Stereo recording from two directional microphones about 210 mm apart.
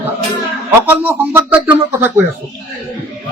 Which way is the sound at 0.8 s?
10° right (ahead or behind).